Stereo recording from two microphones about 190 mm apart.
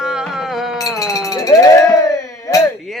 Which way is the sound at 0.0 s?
5° right (ahead or behind).